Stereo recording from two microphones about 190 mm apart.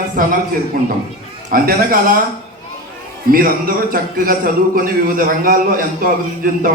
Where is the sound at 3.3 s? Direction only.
50° right (ahead or behind).